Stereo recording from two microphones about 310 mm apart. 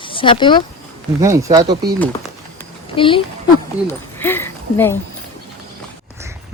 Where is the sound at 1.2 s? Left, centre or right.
Centre.